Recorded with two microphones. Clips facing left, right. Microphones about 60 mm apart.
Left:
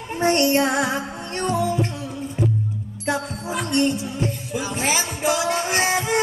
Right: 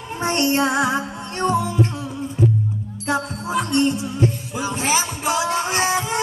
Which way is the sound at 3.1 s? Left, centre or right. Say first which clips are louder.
Right 2 dB; right.